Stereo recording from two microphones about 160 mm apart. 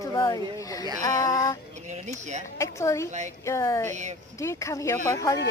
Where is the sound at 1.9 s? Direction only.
45° right (ahead or behind).